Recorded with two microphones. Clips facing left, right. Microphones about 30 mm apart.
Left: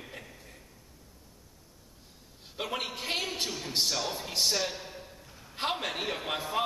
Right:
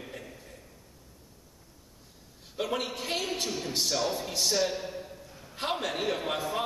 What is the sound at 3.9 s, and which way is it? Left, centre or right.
Speech, centre.